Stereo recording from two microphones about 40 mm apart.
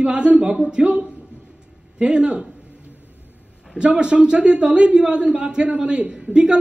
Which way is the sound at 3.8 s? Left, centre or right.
Right.